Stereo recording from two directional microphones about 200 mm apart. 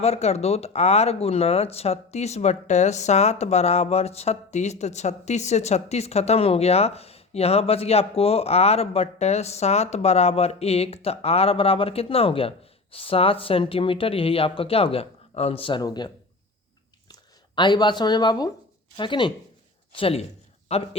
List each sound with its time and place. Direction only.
0.0 s speech: 30° left (ahead or behind)